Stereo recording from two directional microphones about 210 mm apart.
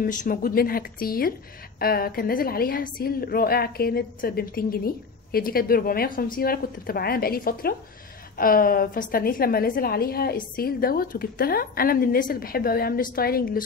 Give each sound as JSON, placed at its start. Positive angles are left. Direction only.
{"t": 0.0, "sound": "a woman's voice", "side_deg": 40}